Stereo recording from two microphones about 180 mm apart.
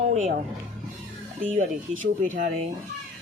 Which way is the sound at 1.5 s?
45° right (ahead or behind).